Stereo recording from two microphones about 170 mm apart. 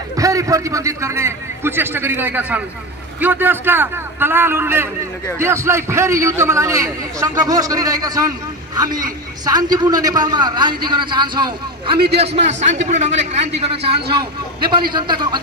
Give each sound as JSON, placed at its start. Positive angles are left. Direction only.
{"t": 0.1, "sound": "a man's voice", "side_deg": -20}
{"t": 12.2, "sound": "a man's voice", "side_deg": -45}